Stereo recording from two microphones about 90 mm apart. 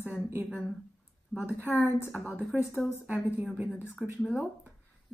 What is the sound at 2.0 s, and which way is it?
Speech, 15° right (ahead or behind).